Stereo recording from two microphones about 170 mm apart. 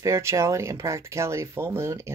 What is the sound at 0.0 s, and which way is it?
Speech, 15° right (ahead or behind).